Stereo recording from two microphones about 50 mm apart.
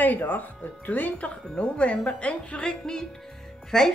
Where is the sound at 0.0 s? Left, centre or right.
Left.